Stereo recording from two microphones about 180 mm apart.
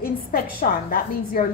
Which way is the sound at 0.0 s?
55° left (ahead or behind).